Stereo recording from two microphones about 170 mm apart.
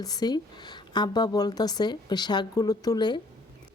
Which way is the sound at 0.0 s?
25° left (ahead or behind).